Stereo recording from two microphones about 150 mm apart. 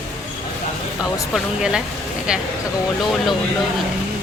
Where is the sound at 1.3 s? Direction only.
5° right (ahead or behind).